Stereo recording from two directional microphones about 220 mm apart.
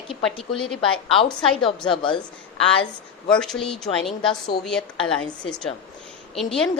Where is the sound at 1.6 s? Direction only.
20° left (ahead or behind).